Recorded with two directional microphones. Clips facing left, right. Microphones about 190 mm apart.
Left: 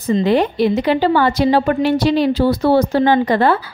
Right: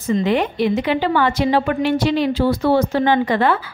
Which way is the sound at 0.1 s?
35° left (ahead or behind).